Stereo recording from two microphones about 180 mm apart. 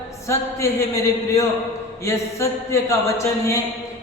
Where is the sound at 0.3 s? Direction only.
15° left (ahead or behind).